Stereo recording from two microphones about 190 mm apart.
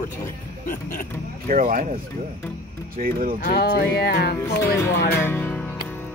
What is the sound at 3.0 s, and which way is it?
Speech, 50° right (ahead or behind).